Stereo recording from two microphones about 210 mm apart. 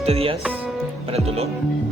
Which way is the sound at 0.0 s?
30° right (ahead or behind).